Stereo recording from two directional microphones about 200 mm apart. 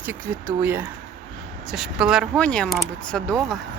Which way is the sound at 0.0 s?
10° right (ahead or behind).